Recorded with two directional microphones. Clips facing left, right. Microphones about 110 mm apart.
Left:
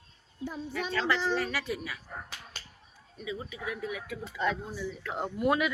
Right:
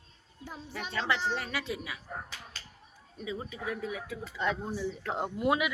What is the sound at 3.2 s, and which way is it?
Speech, 35° right (ahead or behind).